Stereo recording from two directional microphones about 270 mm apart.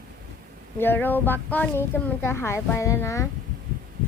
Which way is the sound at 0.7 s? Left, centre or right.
Centre.